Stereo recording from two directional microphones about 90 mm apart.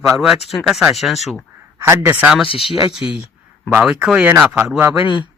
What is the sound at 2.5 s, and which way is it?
Speech, 90° left.